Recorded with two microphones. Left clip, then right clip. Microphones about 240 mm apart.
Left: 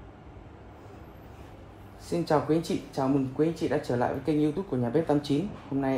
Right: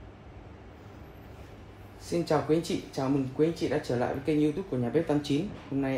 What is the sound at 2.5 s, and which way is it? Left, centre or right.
Speech, centre.